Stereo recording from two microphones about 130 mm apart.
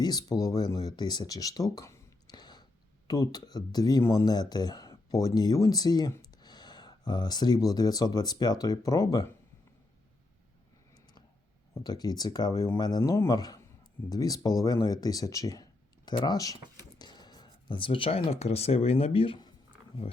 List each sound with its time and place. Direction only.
0.0 s speech: 30° left (ahead or behind)
10.9 s a sound: 35° left (ahead or behind)
11.7 s speech: 30° left (ahead or behind); by 19.4 s 45° left (ahead or behind)